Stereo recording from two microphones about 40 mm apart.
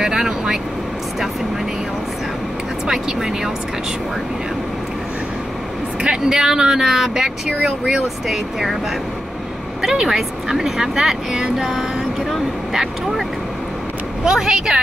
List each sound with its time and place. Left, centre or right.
0.0 s speech: centre
2.9 s speech: centre
6.0 s speech: centre
9.8 s speech: centre
14.2 s speech: centre